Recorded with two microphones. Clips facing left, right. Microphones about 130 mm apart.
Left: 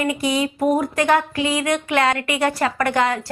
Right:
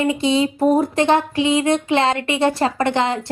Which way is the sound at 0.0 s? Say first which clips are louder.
Right 3 dB; 25° right (ahead or behind).